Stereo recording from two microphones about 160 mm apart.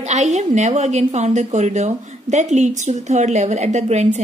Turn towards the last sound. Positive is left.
turn(degrees=-45)  # may be behind; listen again after turning